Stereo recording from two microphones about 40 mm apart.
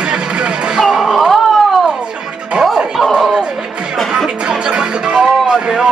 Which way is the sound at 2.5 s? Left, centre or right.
Right.